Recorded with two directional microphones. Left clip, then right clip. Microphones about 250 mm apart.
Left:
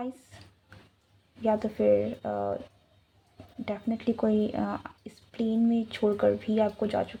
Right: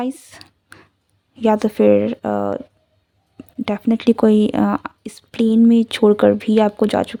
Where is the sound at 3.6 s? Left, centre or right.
Right.